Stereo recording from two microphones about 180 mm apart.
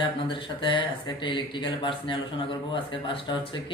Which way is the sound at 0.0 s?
30° left (ahead or behind).